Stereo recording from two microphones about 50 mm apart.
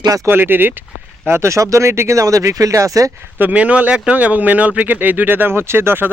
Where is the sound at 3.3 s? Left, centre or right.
Right.